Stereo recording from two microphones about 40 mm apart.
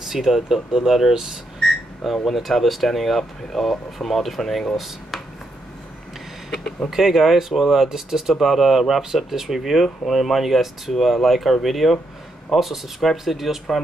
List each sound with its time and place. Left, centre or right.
0.1 s speech: centre
2.2 s speech: centre
4.7 s speech: centre
6.5 s speech: centre
6.9 s speech: centre